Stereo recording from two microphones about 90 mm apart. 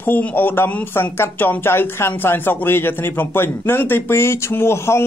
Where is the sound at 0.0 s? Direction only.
20° left (ahead or behind).